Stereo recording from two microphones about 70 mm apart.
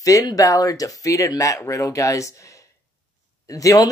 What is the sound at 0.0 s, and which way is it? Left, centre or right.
Speech, left.